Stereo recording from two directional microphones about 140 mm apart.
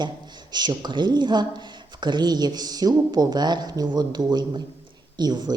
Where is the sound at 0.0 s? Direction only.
30° right (ahead or behind).